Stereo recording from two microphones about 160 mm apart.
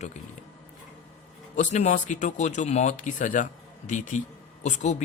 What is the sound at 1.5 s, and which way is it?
Speech, 50° left (ahead or behind).